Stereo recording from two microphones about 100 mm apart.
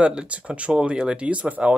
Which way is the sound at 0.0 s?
10° right (ahead or behind).